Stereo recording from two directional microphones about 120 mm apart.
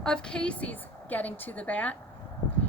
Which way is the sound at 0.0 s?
5° left (ahead or behind).